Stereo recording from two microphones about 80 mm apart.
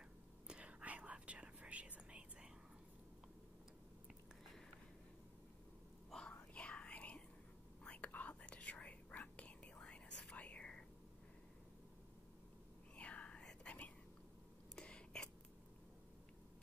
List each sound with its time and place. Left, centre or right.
0.5 s whispering: centre
6.0 s whispering: centre
12.9 s whispering: centre
14.8 s a sound: centre